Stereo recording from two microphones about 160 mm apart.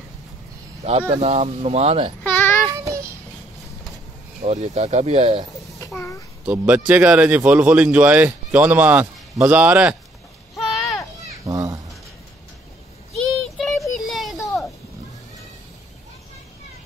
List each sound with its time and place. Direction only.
1.1 s speech: 45° right (ahead or behind)
2.2 s child singing: 15° left (ahead or behind)
2.7 s child singing: 20° right (ahead or behind)
4.4 s speech: 45° right (ahead or behind)
5.9 s a child's voice: 20° left (ahead or behind)
6.4 s speech: 10° right (ahead or behind)
10.5 s a sound: centre (ahead or behind)
11.4 s a sound: 20° right (ahead or behind)
13.2 s child singing: centre (ahead or behind)